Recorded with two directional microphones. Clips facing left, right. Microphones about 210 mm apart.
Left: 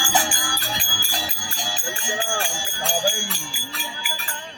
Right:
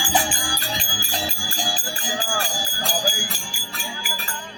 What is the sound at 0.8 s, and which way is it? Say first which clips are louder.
Music: right 3 dB; 25° right (ahead or behind).